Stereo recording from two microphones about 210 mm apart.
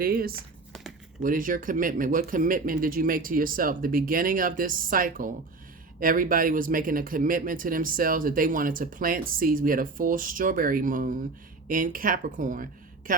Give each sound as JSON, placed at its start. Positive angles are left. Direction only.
{"t": 0.0, "sound": "speech", "side_deg": -45}